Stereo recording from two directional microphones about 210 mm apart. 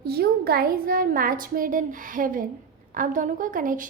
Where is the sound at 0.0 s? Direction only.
50° right (ahead or behind).